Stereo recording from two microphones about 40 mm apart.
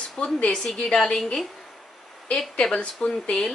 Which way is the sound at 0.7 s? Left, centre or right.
Centre.